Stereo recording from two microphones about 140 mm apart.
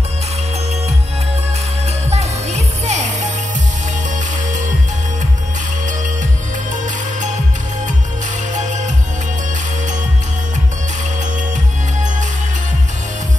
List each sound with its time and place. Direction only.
2.0 s music: 50° right (ahead or behind)